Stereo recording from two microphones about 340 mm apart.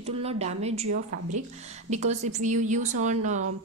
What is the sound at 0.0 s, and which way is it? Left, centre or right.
Speech, centre.